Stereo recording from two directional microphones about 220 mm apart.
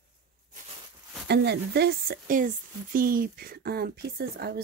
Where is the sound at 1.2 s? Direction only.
50° right (ahead or behind).